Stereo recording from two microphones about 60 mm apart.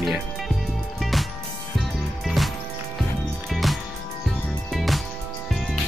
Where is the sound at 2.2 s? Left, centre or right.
Centre.